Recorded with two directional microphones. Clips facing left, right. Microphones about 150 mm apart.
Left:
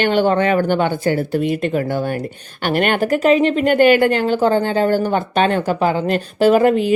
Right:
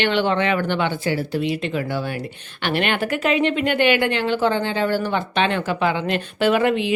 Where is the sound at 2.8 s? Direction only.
40° left (ahead or behind).